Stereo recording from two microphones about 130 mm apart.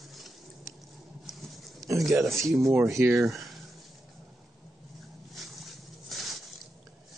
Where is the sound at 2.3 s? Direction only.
20° right (ahead or behind).